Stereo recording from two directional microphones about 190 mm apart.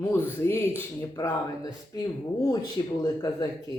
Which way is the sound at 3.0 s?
20° left (ahead or behind).